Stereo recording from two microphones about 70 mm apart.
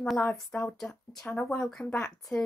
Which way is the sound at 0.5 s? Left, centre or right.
Centre.